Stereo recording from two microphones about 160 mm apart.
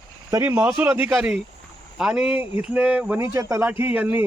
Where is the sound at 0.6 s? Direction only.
10° right (ahead or behind).